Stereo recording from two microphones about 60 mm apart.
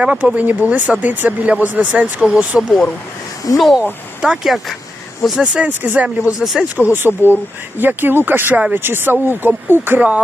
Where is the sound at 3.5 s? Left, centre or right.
Centre.